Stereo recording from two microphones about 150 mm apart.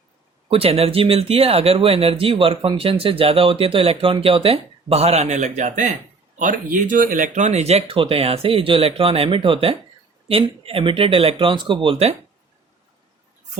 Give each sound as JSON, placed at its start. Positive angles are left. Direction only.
{"t": 0.4, "sound": "speech", "side_deg": -40}